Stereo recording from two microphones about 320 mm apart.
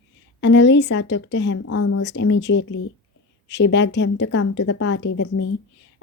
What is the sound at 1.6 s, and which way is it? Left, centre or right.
Speech, left.